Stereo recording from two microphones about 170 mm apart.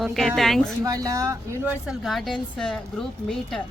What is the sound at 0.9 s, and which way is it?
Speech, 20° right (ahead or behind).